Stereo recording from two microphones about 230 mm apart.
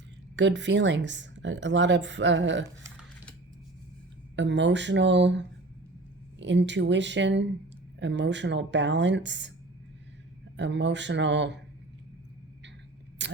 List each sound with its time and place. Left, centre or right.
0.3 s speech: right
4.4 s speech: right
6.4 s speech: right
10.6 s speech: right
13.2 s a sound: right